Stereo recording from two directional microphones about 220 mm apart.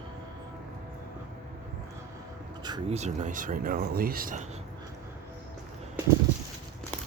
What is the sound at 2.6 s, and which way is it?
Speech, 25° right (ahead or behind).